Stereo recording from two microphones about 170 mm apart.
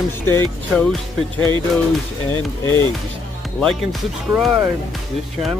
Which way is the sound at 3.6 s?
Centre (ahead or behind).